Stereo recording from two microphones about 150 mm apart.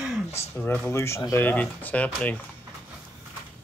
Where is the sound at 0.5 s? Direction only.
15° left (ahead or behind).